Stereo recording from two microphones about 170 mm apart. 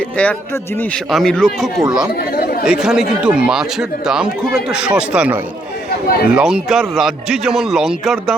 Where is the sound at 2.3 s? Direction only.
60° left (ahead or behind).